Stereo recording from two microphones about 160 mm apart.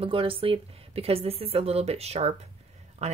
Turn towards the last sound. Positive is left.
turn(degrees=-45)  # may be behind; listen again after turning